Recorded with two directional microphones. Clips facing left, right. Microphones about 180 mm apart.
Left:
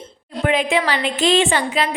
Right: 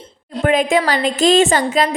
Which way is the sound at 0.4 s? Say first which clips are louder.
Right 3 dB; 45° right (ahead or behind).